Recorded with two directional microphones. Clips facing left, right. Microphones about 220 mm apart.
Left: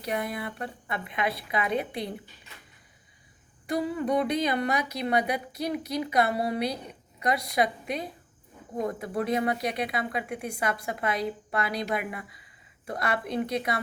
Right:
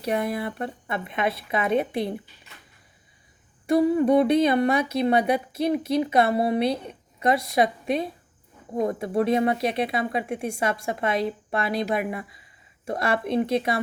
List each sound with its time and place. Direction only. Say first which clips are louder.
0.0 s speech: right 6 dB; 25° right (ahead or behind)
3.7 s speech: right 8 dB; 25° right (ahead or behind)